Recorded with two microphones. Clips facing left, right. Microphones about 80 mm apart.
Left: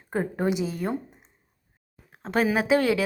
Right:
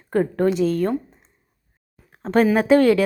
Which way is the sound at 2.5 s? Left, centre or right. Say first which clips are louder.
Right 7 dB; centre.